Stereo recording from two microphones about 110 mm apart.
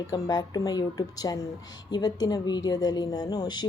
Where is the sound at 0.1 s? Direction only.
35° left (ahead or behind).